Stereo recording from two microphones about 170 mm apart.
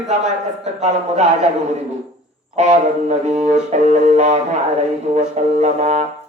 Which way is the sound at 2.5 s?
40° right (ahead or behind).